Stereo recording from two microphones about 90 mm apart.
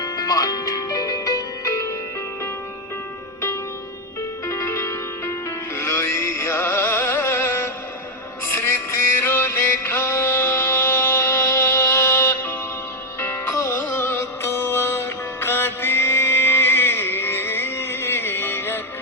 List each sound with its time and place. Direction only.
0.0 s music: 45° left (ahead or behind)
4.4 s music: 35° left (ahead or behind)